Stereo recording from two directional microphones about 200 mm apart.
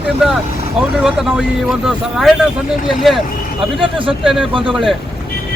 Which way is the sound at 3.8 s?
25° right (ahead or behind).